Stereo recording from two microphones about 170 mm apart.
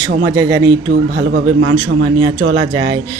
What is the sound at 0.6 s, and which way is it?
Speech, 90° right.